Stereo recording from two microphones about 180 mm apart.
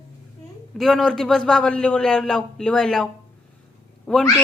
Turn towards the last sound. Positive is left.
turn(degrees=5)  # may be behind; listen again after turning